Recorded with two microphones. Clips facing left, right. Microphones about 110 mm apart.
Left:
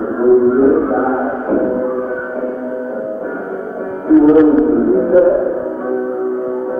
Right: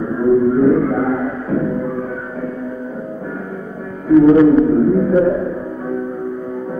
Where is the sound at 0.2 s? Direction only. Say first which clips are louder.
Left 3 dB; 35° left (ahead or behind).